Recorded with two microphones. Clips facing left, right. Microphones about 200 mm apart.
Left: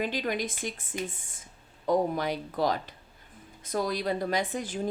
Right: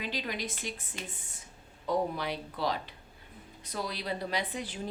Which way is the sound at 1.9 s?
45° left (ahead or behind).